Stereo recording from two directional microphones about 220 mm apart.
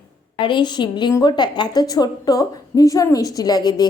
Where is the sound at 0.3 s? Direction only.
20° left (ahead or behind).